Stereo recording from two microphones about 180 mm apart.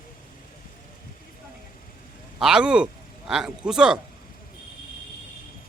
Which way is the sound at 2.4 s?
5° right (ahead or behind).